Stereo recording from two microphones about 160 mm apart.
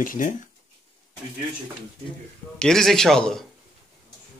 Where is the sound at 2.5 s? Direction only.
5° left (ahead or behind).